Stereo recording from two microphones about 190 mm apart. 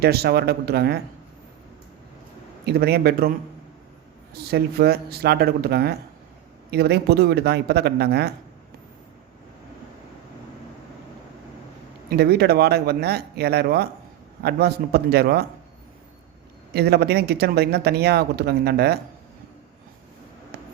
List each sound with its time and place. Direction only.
0.0 s speech: 55° right (ahead or behind)
2.6 s speech: 55° right (ahead or behind)
4.5 s speech: 55° right (ahead or behind)
12.0 s speech: 55° right (ahead or behind)
16.7 s speech: 60° right (ahead or behind)